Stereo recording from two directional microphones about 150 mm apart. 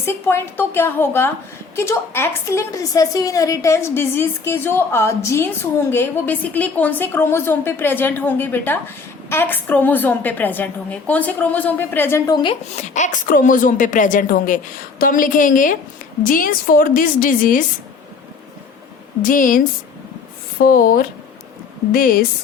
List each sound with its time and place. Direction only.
0.0 s a woman's voice: 15° left (ahead or behind)
12.7 s a woman's voice: 55° left (ahead or behind)
19.3 s a woman's voice: 65° left (ahead or behind)